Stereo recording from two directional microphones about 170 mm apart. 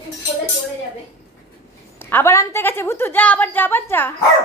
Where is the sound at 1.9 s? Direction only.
15° left (ahead or behind).